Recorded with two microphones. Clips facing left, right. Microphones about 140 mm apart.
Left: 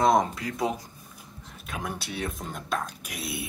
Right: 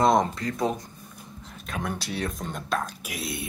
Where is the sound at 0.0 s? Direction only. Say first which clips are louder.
Right 1 dB; centre (ahead or behind).